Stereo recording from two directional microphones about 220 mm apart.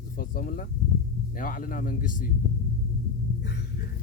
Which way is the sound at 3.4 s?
50° left (ahead or behind).